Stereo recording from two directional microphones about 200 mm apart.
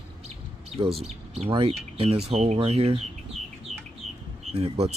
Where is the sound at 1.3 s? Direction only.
30° right (ahead or behind).